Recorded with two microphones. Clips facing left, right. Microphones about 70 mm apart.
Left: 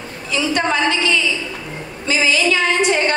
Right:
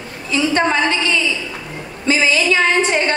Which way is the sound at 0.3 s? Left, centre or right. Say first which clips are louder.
Right 2 dB; right.